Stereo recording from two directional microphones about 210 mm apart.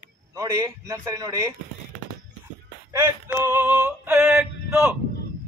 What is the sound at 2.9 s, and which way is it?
Synthetic singing, 10° right (ahead or behind).